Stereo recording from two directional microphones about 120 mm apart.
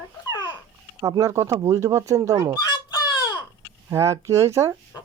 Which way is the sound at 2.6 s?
35° left (ahead or behind).